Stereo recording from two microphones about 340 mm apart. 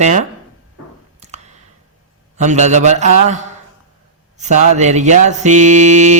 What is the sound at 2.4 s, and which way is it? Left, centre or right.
Mantra, right.